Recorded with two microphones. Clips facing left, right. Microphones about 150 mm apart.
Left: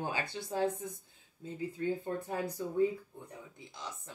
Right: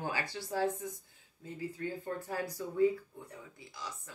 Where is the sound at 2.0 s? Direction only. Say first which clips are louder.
Left 1 dB; 25° left (ahead or behind).